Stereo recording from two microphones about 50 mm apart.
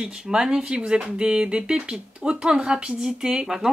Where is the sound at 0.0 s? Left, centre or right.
Centre.